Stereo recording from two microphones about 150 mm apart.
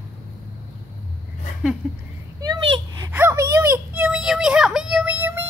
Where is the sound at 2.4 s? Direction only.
20° right (ahead or behind).